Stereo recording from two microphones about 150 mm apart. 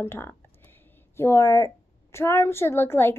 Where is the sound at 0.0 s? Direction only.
15° left (ahead or behind).